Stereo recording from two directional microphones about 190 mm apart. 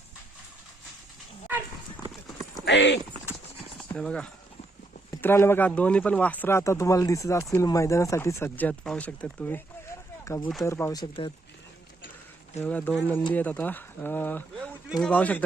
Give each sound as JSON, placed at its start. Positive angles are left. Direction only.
{"t": 2.6, "sound": "speech", "side_deg": 65}
{"t": 3.8, "sound": "speech", "side_deg": 5}
{"t": 12.5, "sound": "speech", "side_deg": 10}